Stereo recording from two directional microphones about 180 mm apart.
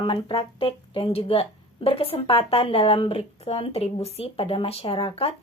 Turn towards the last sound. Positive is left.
turn(degrees=30)  # may be behind; listen again after turning